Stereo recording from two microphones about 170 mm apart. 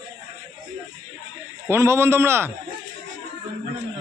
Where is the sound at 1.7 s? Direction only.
15° right (ahead or behind).